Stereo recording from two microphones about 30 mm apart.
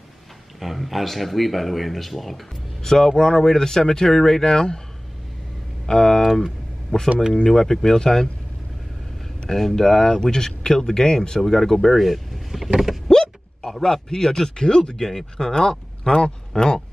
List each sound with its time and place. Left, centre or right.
0.6 s speech: centre
2.8 s speech: centre
4.5 s speech: left
5.9 s speech: left
7.4 s speech: centre
9.6 s speech: centre
13.1 s a sound: centre
14.0 s speech: left
15.0 s speech: centre; by 16.8 s left